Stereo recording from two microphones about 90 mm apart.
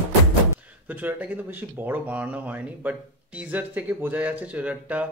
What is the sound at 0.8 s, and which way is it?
Speech, 20° right (ahead or behind).